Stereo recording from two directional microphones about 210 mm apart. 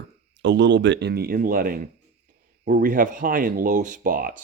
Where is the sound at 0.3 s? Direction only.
55° right (ahead or behind).